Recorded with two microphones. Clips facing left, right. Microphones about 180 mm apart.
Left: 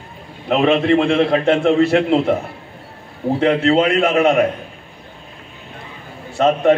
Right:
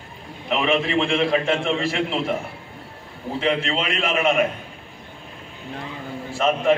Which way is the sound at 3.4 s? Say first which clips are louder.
Left 8 dB; 60° left (ahead or behind).